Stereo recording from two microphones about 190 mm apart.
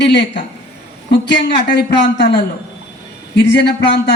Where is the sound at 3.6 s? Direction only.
60° left (ahead or behind).